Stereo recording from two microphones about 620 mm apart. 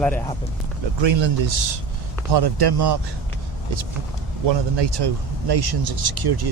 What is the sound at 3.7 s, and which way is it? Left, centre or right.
Speech, right.